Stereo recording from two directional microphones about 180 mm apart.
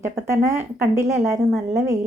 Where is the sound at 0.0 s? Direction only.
15° right (ahead or behind).